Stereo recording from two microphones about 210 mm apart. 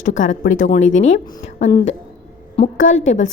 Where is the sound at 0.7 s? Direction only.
65° left (ahead or behind).